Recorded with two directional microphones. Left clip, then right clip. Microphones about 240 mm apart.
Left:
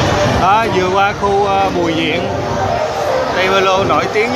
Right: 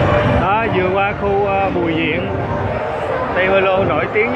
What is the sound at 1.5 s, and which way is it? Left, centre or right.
Speech, left.